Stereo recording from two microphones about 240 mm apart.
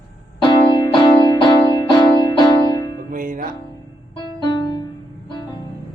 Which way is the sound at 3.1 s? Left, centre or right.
Right.